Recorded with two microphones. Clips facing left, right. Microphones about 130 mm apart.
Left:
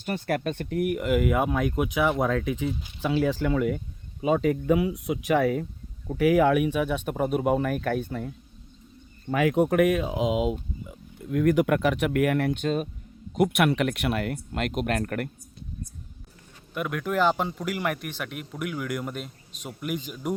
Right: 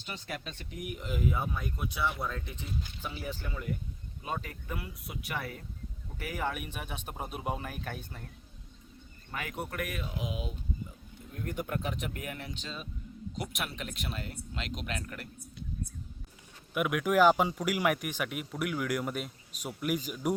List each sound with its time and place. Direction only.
0.0 s speech: 60° left (ahead or behind)
9.3 s speech: 90° left; by 15.3 s 60° left (ahead or behind)
16.7 s speech: 5° right (ahead or behind)